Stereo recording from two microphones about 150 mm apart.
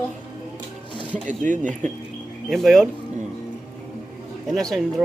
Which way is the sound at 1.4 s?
55° right (ahead or behind).